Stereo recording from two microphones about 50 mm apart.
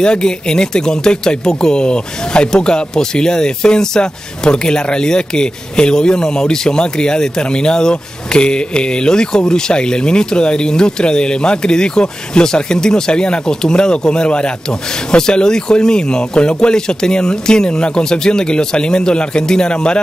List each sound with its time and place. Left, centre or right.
0.0 s speech: centre